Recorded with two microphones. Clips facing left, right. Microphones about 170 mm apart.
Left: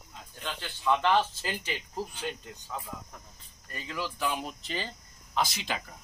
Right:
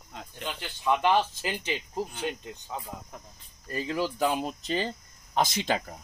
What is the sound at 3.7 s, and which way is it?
A man's voice, 35° right (ahead or behind).